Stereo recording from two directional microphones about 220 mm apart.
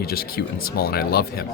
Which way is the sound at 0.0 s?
45° left (ahead or behind).